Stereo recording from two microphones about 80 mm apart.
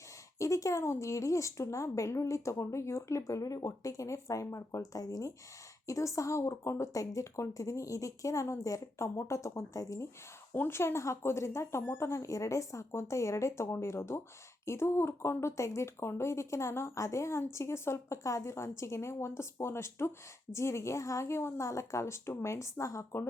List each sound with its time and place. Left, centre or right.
0.3 s speech: left
10.5 s speech: left